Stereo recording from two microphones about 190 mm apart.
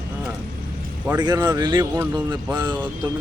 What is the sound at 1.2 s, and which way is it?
Speech, 20° right (ahead or behind).